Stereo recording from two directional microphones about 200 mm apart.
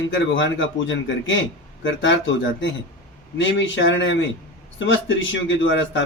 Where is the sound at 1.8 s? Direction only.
70° left (ahead or behind).